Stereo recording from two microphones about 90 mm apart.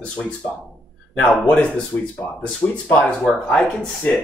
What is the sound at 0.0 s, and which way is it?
Speech, 15° left (ahead or behind).